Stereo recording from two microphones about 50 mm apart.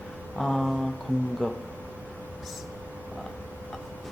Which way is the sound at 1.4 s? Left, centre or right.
Centre.